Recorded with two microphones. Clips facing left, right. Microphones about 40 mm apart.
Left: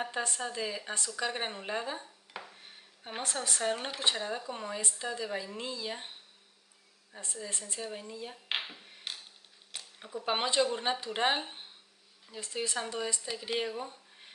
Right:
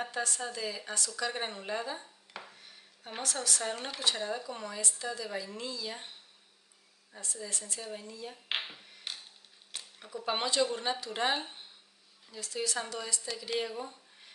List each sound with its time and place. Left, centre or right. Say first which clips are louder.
0.1 s speech: left 1 dB; left
7.3 s speech: left 1 dB; left
7.8 s speech: left 2 dB; centre
8.5 s finger snapping: even; centre
9.8 s speech: left 1 dB; centre